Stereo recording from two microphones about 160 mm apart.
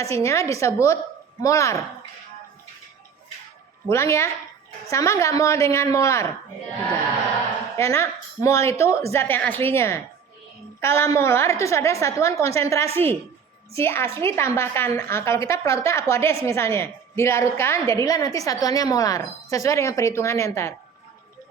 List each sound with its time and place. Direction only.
0.0 s a woman's voice: 20° left (ahead or behind)
3.8 s a woman's voice: 15° left (ahead or behind)
7.8 s a woman's voice: 15° left (ahead or behind)